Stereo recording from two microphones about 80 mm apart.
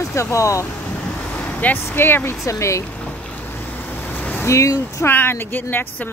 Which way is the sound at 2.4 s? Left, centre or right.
Left.